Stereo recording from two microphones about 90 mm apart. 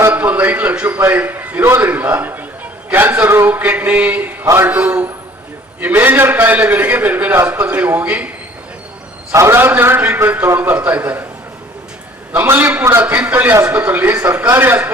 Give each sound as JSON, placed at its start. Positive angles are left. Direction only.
{"t": 0.1, "sound": "a man's voice", "side_deg": -20}
{"t": 4.4, "sound": "a man's voice", "side_deg": -30}
{"t": 4.7, "sound": "a man's voice", "side_deg": -20}
{"t": 9.3, "sound": "a man's voice", "side_deg": -30}
{"t": 12.3, "sound": "a man's voice", "side_deg": -20}
{"t": 13.1, "sound": "a man's voice", "side_deg": -20}